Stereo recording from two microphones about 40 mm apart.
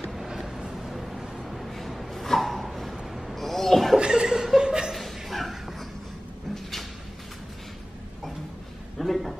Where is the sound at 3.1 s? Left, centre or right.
Centre.